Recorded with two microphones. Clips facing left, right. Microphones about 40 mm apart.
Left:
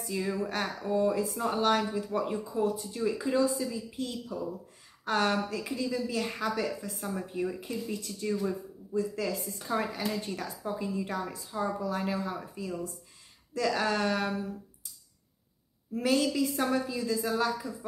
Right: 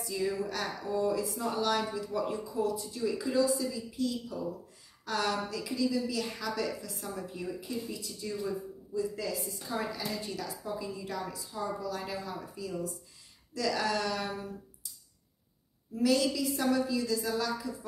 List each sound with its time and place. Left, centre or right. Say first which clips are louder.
0.0 s speech: even; left
16.0 s speech: left 1 dB; left